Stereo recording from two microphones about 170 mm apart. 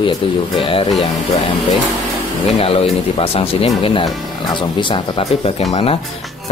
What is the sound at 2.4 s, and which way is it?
Speech, 35° left (ahead or behind).